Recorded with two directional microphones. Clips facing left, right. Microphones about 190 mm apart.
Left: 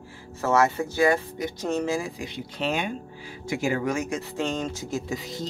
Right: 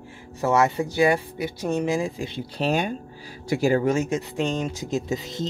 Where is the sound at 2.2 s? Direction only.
30° right (ahead or behind).